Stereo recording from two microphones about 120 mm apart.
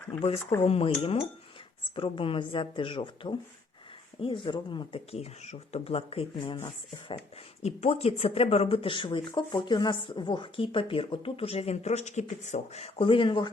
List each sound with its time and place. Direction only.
0.1 s speech: 50° left (ahead or behind)
2.0 s speech: 50° left (ahead or behind)
5.1 s speech: 65° left (ahead or behind); by 6.6 s 45° left (ahead or behind)
7.6 s speech: 60° left (ahead or behind)
13.0 s speech: 45° left (ahead or behind)